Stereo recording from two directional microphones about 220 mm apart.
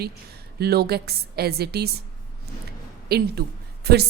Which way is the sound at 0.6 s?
45° right (ahead or behind).